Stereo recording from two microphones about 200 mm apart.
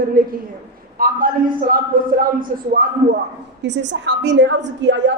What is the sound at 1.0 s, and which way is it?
A woman's voice, 45° right (ahead or behind).